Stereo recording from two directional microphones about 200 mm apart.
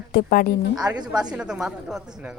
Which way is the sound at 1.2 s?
5° right (ahead or behind).